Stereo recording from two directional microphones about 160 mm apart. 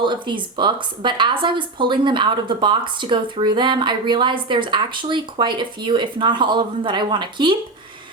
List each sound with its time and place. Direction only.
0.0 s speech: 30° right (ahead or behind)